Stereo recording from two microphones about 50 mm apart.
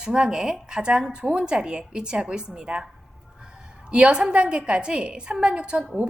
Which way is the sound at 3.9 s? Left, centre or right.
Centre.